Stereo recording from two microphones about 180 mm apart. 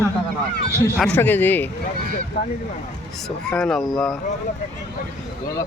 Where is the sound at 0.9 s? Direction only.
10° left (ahead or behind).